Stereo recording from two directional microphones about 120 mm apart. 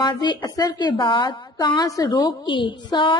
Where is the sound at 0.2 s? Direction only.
35° left (ahead or behind).